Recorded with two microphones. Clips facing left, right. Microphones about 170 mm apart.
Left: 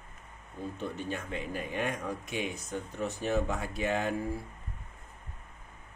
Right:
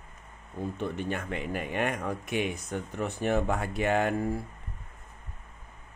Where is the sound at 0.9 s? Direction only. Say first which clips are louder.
Right 3 dB; 65° right (ahead or behind).